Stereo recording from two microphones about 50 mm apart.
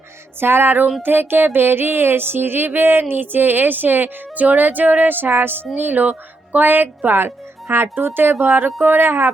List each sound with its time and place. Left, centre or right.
0.3 s speech: right
1.0 s music: right
5.7 s speech: right